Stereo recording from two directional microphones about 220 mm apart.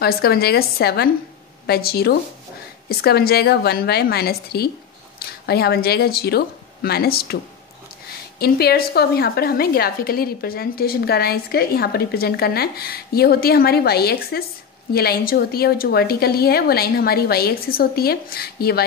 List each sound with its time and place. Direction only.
0.0 s a woman's voice: 45° left (ahead or behind)
8.4 s a woman's voice: 45° left (ahead or behind)